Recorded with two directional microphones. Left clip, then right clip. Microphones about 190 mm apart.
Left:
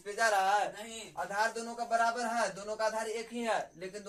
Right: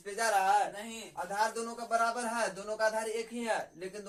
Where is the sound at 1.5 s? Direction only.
5° left (ahead or behind).